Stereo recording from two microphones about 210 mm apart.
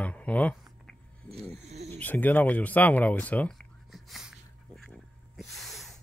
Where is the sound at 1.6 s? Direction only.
30° right (ahead or behind).